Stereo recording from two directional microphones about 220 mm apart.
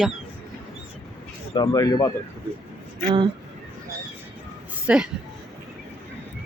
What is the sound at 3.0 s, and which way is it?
Speech, 20° right (ahead or behind).